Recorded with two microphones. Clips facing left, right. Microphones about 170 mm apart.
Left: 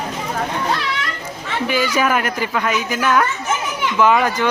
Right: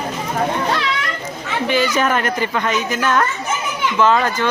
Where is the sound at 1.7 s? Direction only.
10° left (ahead or behind).